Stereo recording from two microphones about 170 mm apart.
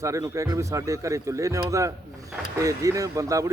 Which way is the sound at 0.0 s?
20° right (ahead or behind).